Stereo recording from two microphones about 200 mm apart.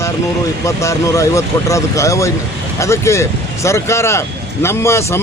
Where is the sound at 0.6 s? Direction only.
15° left (ahead or behind).